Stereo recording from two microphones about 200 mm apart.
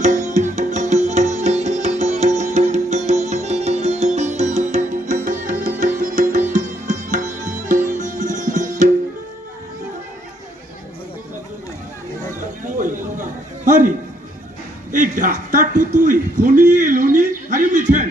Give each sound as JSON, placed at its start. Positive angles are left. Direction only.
{"t": 0.0, "sound": "music", "side_deg": -35}
{"t": 6.5, "sound": "sitar", "side_deg": -40}
{"t": 12.6, "sound": "a sound", "side_deg": -40}